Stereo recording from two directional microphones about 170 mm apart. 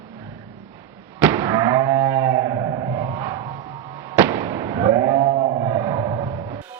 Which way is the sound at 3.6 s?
30° right (ahead or behind).